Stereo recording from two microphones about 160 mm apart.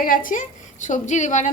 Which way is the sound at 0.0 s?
60° left (ahead or behind).